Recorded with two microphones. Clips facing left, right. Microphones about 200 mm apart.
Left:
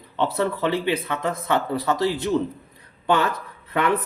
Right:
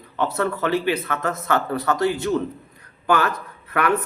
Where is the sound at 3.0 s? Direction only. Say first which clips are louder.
Right 1 dB; 25° left (ahead or behind).